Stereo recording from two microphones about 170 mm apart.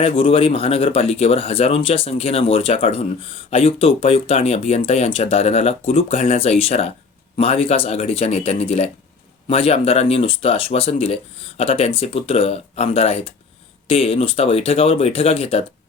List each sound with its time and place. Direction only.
0.0 s speech: 35° left (ahead or behind)